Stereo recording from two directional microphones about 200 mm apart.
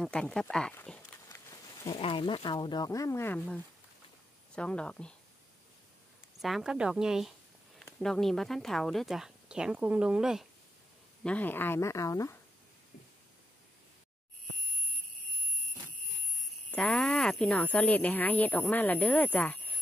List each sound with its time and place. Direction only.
0.0 s speech: 5° left (ahead or behind)
1.9 s speech: 25° left (ahead or behind); by 5.1 s 5° left (ahead or behind)
6.4 s speech: centre (ahead or behind)
11.2 s speech: 10° left (ahead or behind)
16.7 s speech: 5° left (ahead or behind)